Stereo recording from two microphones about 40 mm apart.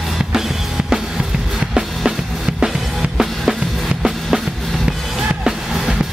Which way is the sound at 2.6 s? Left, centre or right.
Centre.